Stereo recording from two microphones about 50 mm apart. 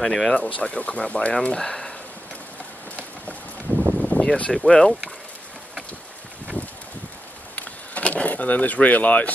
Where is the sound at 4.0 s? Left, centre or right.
Left.